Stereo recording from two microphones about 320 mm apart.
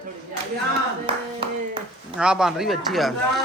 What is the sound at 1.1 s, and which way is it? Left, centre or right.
Speech, centre.